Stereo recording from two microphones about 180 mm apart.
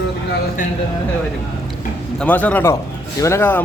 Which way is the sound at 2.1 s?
10° left (ahead or behind).